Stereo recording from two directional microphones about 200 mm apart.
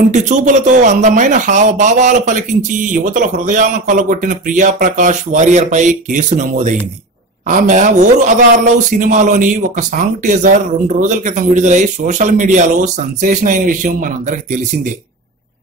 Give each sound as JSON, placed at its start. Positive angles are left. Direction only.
{"t": 0.1, "sound": "a man's voice", "side_deg": -40}